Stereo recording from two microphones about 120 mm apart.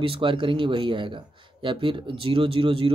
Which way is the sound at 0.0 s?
45° right (ahead or behind).